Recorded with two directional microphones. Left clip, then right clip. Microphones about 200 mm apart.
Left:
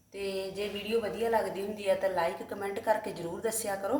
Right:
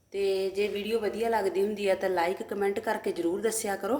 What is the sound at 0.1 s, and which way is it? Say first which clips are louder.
A woman's voice: right 7 dB; 50° right (ahead or behind).